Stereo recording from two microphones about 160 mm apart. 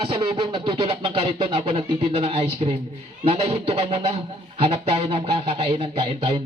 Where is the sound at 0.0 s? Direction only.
35° right (ahead or behind).